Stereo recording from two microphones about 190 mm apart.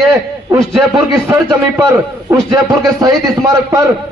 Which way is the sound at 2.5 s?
15° right (ahead or behind).